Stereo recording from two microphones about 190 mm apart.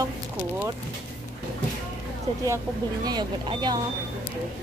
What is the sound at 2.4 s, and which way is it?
Speech, 20° right (ahead or behind).